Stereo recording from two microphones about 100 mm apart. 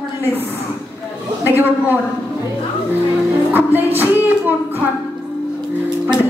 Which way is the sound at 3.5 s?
20° right (ahead or behind).